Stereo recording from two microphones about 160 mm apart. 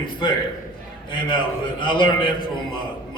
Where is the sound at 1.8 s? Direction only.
30° left (ahead or behind).